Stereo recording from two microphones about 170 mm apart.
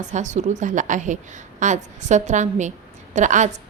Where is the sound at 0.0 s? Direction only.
45° right (ahead or behind).